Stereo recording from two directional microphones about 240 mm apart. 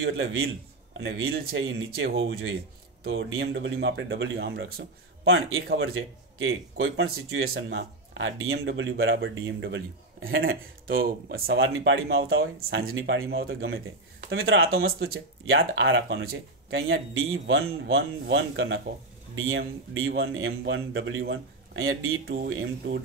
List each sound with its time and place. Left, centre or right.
0.0 s a man's voice: right
5.2 s speech: right
7.4 s a man's voice: right
10.9 s speech: right
15.4 s a man's voice: right
19.9 s a man's voice: right